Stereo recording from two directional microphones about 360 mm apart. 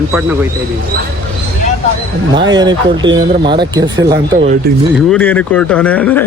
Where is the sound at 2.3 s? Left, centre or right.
Centre.